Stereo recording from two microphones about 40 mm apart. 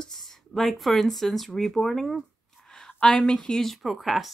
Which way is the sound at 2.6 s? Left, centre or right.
Centre.